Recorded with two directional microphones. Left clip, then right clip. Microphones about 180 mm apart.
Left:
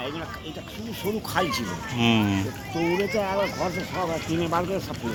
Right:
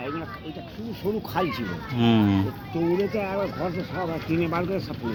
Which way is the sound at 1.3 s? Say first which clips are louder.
Left 4 dB; 50° right (ahead or behind).